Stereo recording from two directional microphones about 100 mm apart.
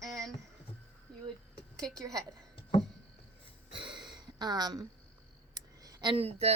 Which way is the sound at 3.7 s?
55° right (ahead or behind).